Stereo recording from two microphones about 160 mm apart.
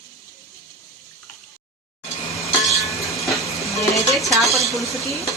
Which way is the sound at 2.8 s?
20° left (ahead or behind).